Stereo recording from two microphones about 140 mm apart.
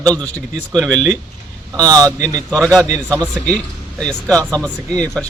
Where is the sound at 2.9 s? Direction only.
25° right (ahead or behind).